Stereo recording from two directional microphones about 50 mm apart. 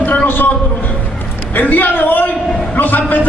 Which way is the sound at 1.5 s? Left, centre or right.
Left.